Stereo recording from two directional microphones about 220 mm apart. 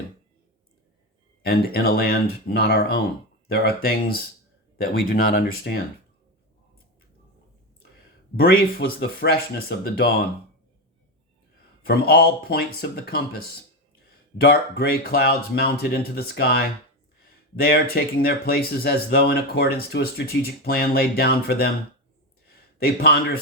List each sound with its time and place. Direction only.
1.4 s speech: 45° left (ahead or behind)
8.4 s speech: 45° left (ahead or behind)
11.9 s speech: 45° left (ahead or behind)
22.8 s speech: 45° left (ahead or behind)